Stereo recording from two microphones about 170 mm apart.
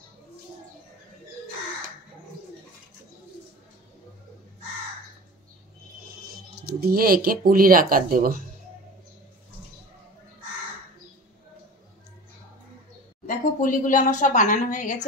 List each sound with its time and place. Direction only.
6.8 s speech: 60° right (ahead or behind)
13.3 s speech: 50° left (ahead or behind)